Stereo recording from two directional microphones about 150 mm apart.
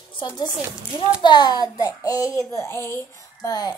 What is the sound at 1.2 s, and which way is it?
A child's voice, 30° left (ahead or behind).